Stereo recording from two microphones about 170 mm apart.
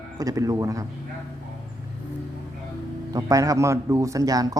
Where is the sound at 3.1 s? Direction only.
20° right (ahead or behind).